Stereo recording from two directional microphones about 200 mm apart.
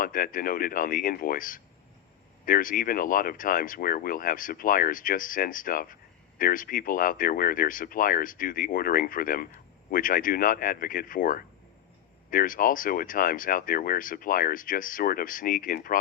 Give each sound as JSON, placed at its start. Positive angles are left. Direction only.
{"t": 0.0, "sound": "speech", "side_deg": 45}